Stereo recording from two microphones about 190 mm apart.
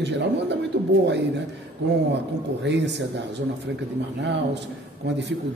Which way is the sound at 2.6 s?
65° right (ahead or behind).